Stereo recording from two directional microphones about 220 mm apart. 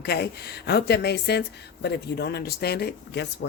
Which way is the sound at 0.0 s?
45° left (ahead or behind).